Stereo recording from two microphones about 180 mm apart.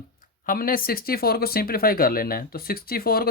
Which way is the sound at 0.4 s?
50° left (ahead or behind).